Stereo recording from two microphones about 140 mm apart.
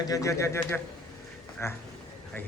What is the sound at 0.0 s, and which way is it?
A man's voice, 25° left (ahead or behind).